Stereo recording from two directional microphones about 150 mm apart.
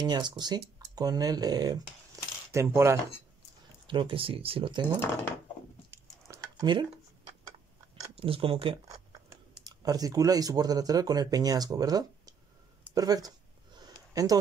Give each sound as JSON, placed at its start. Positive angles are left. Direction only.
{"t": 0.0, "sound": "speech", "side_deg": -30}
{"t": 2.2, "sound": "coin", "side_deg": -25}
{"t": 2.5, "sound": "speech", "side_deg": -15}
{"t": 3.8, "sound": "speech", "side_deg": -35}
{"t": 5.9, "sound": "a sound", "side_deg": -20}
{"t": 8.2, "sound": "speech", "side_deg": -40}
{"t": 9.7, "sound": "speech", "side_deg": -25}
{"t": 13.7, "sound": "a sound", "side_deg": -25}